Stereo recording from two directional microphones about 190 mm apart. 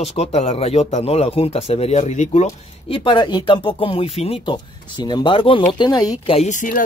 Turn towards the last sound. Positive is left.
turn(degrees=45)  # may be behind; listen again after turning